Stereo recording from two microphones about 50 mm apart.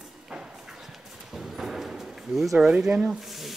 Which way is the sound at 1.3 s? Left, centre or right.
Centre.